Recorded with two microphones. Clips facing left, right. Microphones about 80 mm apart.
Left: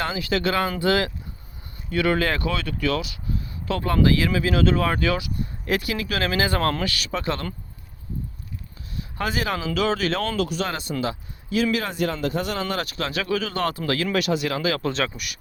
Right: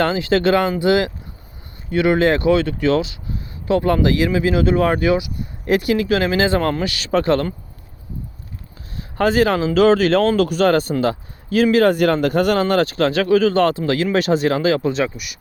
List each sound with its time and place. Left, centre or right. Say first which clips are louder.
0.0 s speech: right 8 dB; right
0.7 s speech: right 5 dB; centre
6.6 s speech: right 4 dB; centre
7.1 s speech: right 14 dB; right
9.0 s speech: right 11 dB; right
13.7 s speech: right 6 dB; right
14.8 s speech: right 6 dB; centre